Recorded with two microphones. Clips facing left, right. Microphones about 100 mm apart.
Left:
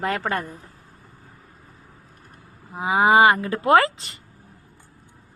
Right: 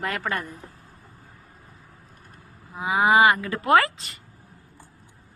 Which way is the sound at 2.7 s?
30° left (ahead or behind).